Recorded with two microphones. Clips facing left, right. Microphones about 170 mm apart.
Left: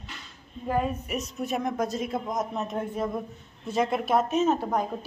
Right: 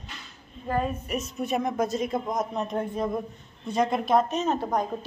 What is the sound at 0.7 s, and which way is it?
A woman's voice, 5° left (ahead or behind).